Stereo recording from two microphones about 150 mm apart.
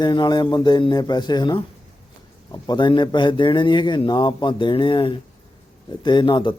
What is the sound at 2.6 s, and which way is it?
A man's voice, 30° left (ahead or behind).